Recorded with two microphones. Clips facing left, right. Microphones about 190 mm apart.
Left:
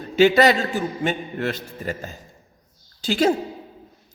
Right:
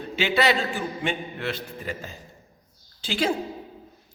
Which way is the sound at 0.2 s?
45° left (ahead or behind).